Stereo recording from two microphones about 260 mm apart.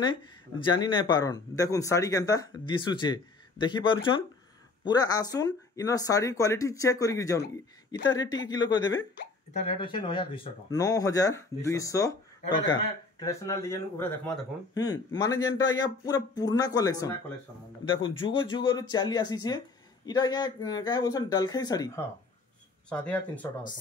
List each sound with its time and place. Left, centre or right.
0.0 s speech: centre